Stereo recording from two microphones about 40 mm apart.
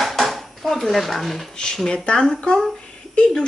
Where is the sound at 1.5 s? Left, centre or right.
Centre.